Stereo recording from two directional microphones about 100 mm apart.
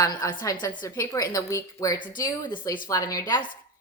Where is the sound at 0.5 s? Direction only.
50° left (ahead or behind).